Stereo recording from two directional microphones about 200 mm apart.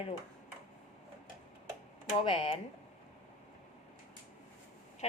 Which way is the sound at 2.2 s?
25° left (ahead or behind).